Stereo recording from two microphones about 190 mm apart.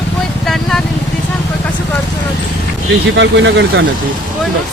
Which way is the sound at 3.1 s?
70° right (ahead or behind).